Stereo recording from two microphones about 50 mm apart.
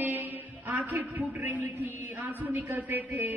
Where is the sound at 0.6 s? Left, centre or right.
Right.